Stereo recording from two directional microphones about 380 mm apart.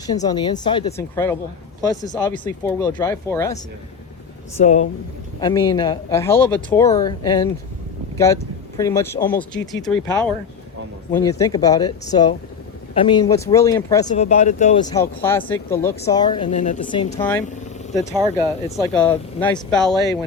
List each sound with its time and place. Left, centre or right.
0.1 s speech: centre
4.5 s speech: centre
8.8 s speech: centre
18.9 s speech: centre